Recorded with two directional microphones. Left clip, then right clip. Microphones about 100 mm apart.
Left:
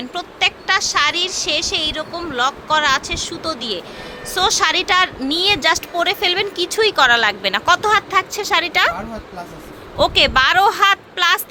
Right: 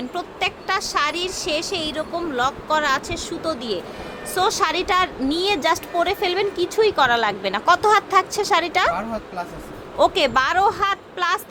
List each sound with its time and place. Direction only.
0.1 s a woman's voice: 5° right (ahead or behind)
10.0 s a woman's voice: 10° right (ahead or behind)